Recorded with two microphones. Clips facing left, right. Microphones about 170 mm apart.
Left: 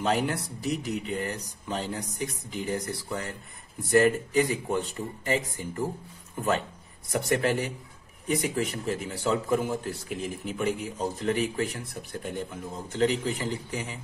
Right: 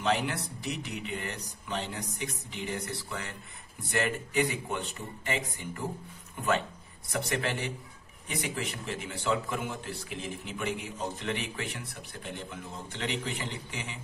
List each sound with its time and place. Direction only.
0.0 s a man's voice: 45° left (ahead or behind)
7.1 s a man's voice: 45° left (ahead or behind)